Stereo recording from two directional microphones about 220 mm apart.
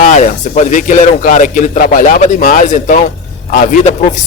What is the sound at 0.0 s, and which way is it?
A man's voice, 35° left (ahead or behind).